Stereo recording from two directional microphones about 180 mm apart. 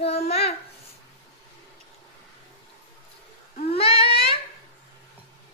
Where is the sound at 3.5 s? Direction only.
30° left (ahead or behind).